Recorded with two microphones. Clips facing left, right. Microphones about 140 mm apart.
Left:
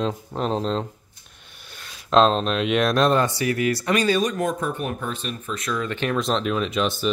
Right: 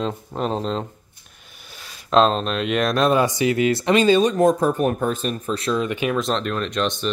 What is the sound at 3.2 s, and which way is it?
Speech, 20° right (ahead or behind).